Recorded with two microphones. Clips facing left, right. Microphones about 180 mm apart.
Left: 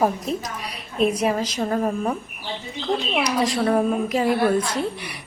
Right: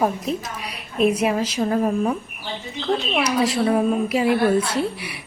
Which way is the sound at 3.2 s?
5° right (ahead or behind).